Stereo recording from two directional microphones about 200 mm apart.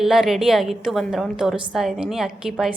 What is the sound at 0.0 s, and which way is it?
A woman's voice, centre (ahead or behind).